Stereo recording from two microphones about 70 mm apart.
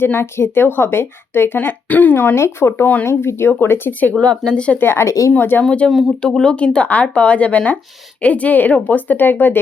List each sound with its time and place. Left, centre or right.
0.0 s a woman's voice: left
4.2 s speech: centre
4.8 s speech: left
5.4 s a woman's voice: left
5.6 s a woman's voice: centre